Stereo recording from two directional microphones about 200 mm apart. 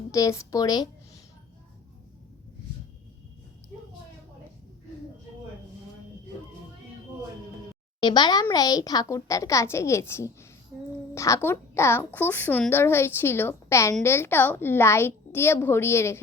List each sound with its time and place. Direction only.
0.1 s speech: 15° left (ahead or behind)
8.0 s a woman's voice: 20° left (ahead or behind)